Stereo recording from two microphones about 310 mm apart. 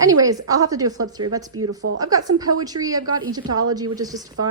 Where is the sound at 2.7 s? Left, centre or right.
Right.